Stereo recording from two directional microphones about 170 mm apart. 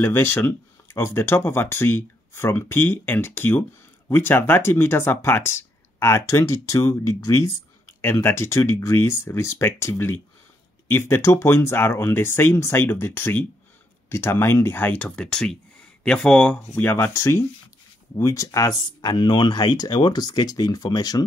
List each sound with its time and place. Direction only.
0.0 s speech: 15° left (ahead or behind)